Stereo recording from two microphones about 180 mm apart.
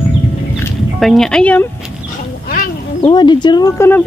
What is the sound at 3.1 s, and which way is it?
Speech, 25° left (ahead or behind).